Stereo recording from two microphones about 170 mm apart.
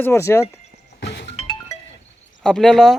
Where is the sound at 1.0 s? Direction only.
85° left.